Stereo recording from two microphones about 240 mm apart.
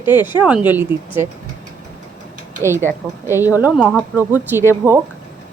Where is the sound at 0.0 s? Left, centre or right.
Centre.